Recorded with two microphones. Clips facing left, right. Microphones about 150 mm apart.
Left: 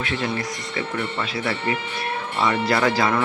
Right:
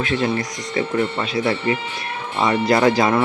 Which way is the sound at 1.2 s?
20° right (ahead or behind).